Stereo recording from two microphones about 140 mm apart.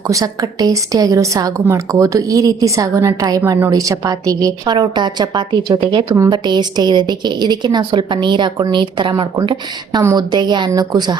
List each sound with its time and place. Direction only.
0.1 s a woman's voice: 25° right (ahead or behind)